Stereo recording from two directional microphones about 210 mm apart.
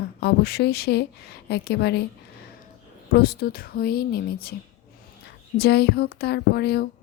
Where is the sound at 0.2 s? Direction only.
50° left (ahead or behind).